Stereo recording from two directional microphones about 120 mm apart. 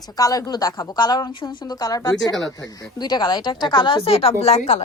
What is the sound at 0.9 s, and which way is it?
Speech, 40° left (ahead or behind).